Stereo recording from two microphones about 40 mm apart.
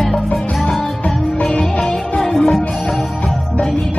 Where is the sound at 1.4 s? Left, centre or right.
Centre.